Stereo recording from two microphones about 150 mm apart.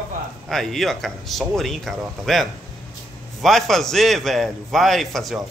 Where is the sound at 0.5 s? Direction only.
Centre (ahead or behind).